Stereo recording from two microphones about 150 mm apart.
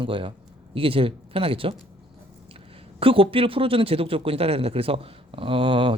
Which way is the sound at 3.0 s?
35° right (ahead or behind).